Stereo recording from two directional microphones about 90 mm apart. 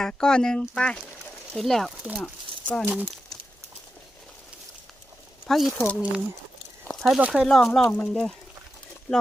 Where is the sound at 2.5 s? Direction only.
90° right.